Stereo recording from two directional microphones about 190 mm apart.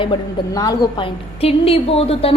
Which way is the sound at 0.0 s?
20° left (ahead or behind).